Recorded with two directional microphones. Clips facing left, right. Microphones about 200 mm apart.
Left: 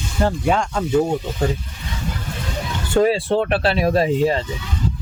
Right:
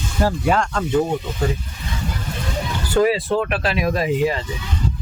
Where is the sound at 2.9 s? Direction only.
30° left (ahead or behind).